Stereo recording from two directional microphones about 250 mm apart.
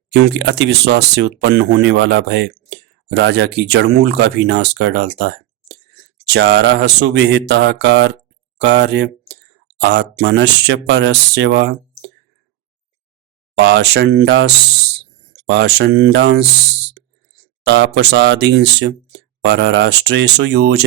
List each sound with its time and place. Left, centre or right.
0.1 s speech: right
13.6 s speech: right
17.7 s speech: right